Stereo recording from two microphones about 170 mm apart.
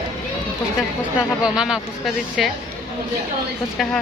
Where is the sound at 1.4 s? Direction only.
5° right (ahead or behind).